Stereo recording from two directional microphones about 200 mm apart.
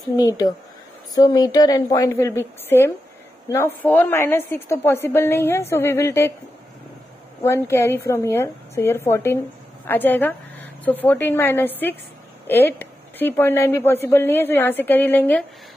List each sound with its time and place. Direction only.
1.1 s a woman's voice: 20° left (ahead or behind)
7.4 s a woman's voice: 15° left (ahead or behind)